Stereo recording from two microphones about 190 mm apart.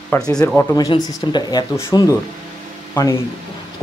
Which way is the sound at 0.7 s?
20° left (ahead or behind).